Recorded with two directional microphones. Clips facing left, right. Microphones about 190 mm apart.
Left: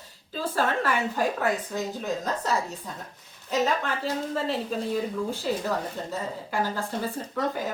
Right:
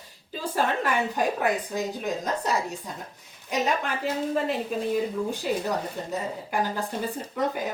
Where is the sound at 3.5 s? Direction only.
15° right (ahead or behind).